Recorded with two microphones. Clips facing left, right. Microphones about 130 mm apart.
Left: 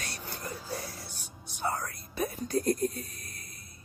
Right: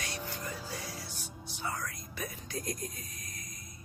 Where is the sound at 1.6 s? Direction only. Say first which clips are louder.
Left 5 dB; 40° left (ahead or behind).